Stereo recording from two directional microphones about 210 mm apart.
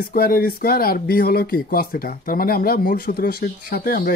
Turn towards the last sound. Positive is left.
turn(degrees=45)  # may be behind; listen again after turning